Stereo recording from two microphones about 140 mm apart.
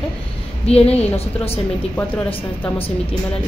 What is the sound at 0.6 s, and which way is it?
Speech, 45° left (ahead or behind).